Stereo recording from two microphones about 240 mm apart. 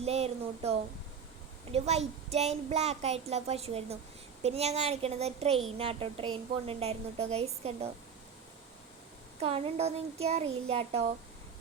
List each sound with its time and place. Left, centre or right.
0.0 s speech: right
9.4 s speech: right